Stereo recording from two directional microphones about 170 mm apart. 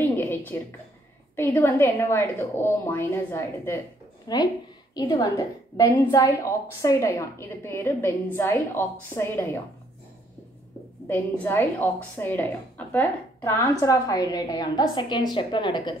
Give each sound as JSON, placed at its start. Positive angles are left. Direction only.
{"t": 0.0, "sound": "a sound", "side_deg": 10}
{"t": 1.3, "sound": "a woman's voice", "side_deg": 15}
{"t": 11.1, "sound": "a woman's voice", "side_deg": 10}